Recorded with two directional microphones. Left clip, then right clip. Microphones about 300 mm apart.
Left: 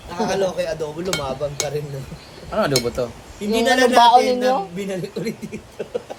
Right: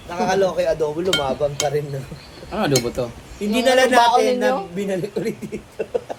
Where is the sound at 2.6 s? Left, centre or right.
Centre.